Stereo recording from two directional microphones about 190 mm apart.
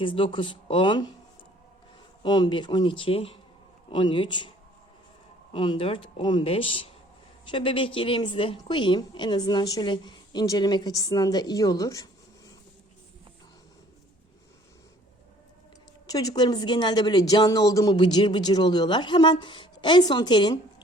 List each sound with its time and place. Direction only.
0.0 s a woman's voice: 25° left (ahead or behind)
2.2 s a woman's voice: 20° left (ahead or behind)
5.5 s a woman's voice: 30° left (ahead or behind)
16.0 s a woman's voice: 20° left (ahead or behind)